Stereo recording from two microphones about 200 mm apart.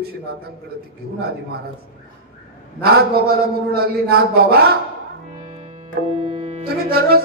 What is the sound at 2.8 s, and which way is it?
A man's voice, 50° right (ahead or behind).